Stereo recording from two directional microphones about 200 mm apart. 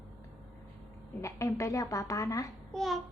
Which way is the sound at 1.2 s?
15° left (ahead or behind).